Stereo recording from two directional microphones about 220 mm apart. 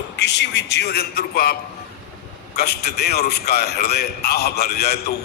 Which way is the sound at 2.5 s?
45° left (ahead or behind).